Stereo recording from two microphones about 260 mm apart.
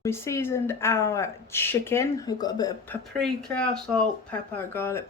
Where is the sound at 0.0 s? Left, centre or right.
Centre.